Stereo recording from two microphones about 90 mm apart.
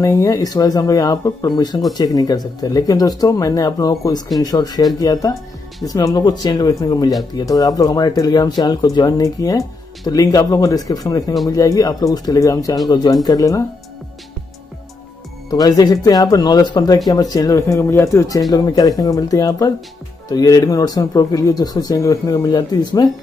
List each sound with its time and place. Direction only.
0.0 s speech: 35° left (ahead or behind)
15.5 s speech: 45° left (ahead or behind)
18.5 s speech: 50° left (ahead or behind)
22.5 s speech: 50° left (ahead or behind)